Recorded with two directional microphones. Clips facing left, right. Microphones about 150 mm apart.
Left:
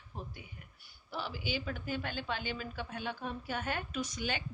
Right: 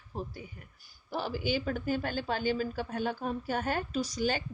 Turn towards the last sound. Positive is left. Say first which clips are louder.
# right 6 dB
turn(degrees=-40)  # may be behind; listen again after turning